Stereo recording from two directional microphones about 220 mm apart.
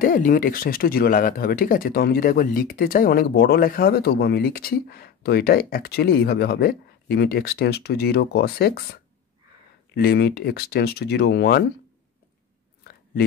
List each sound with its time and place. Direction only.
0.0 s speech: 40° left (ahead or behind)